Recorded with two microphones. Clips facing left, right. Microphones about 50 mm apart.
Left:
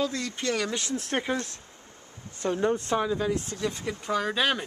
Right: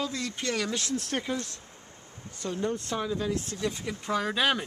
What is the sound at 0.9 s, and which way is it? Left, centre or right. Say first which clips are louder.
Speech: left 2 dB; left.